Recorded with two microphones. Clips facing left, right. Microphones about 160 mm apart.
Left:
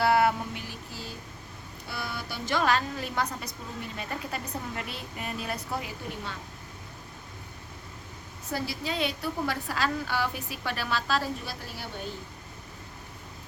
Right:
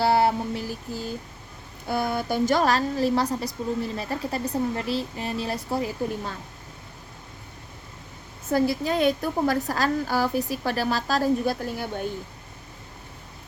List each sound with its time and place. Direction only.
0.0 s music: 30° right (ahead or behind)
1.9 s speech: 50° right (ahead or behind)
8.4 s a woman's voice: 50° right (ahead or behind)